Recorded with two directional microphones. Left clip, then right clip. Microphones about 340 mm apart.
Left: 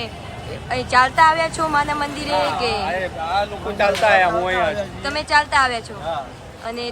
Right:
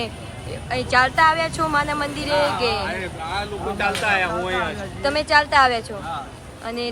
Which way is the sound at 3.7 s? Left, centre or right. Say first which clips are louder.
Left 6 dB; left.